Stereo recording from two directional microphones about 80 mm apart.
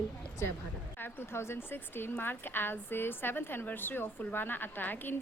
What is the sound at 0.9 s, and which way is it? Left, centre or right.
A woman's voice, left.